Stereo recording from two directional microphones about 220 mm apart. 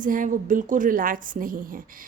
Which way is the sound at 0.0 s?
35° right (ahead or behind).